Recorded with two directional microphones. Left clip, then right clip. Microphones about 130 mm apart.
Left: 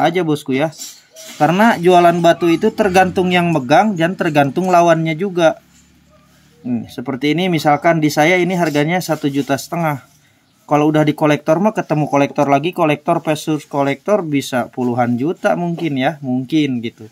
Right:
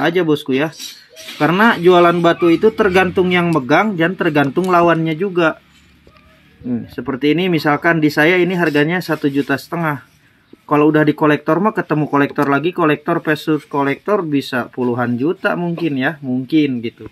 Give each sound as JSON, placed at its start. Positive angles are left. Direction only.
{"t": 0.0, "sound": "speech", "side_deg": 20}
{"t": 7.0, "sound": "speech", "side_deg": 20}